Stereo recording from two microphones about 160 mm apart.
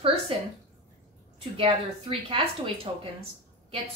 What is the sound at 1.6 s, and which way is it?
A woman's voice, 35° right (ahead or behind).